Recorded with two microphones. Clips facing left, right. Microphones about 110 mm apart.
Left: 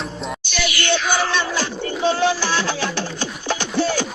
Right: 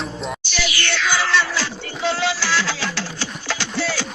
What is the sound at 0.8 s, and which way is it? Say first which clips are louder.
Music: left 3 dB; 15° left (ahead or behind).